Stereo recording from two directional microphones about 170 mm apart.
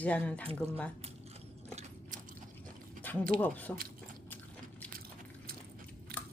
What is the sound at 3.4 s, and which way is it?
Speech, 10° left (ahead or behind).